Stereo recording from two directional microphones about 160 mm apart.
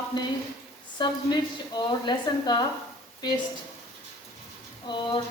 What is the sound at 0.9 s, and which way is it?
A woman's voice, 30° left (ahead or behind).